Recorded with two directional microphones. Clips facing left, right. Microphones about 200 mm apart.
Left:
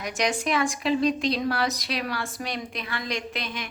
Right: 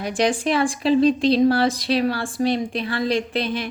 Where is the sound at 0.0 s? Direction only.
30° right (ahead or behind).